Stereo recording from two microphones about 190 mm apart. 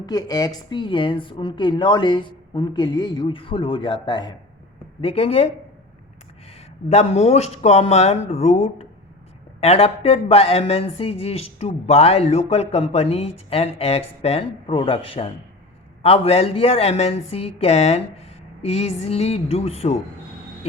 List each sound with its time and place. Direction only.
0.0 s a woman's voice: 20° left (ahead or behind)
6.8 s speech: 35° left (ahead or behind)